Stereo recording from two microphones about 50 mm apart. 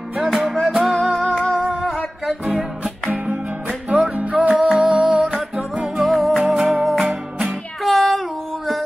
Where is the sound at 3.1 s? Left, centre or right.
Right.